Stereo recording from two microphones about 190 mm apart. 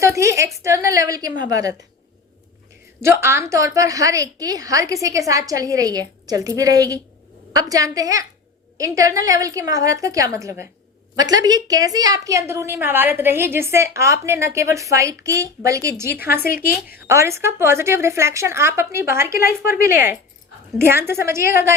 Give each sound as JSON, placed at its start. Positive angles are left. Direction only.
{"t": 0.0, "sound": "a sound", "side_deg": -15}
{"t": 0.6, "sound": "a woman's voice", "side_deg": -15}
{"t": 3.0, "sound": "a woman's voice", "side_deg": -15}